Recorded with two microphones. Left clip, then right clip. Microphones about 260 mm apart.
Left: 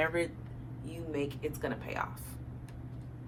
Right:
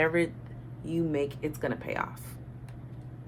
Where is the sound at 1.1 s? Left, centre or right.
Right.